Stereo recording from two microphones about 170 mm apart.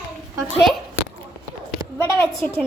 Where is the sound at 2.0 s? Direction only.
15° left (ahead or behind).